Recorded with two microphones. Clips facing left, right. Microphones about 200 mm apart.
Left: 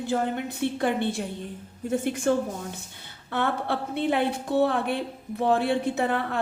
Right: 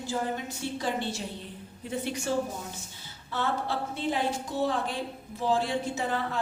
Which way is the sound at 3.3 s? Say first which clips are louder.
Left 3 dB; 60° left (ahead or behind).